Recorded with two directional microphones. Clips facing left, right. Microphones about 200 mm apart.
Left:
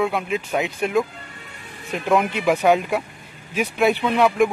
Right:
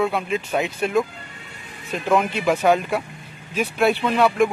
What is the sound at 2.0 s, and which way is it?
Speech, centre (ahead or behind).